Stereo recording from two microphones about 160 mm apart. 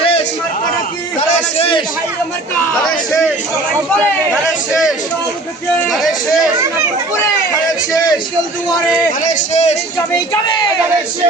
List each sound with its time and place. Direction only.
1.5 s a man's voice: 35° left (ahead or behind)
5.8 s a man's voice: centre (ahead or behind)
9.2 s speech: 50° left (ahead or behind)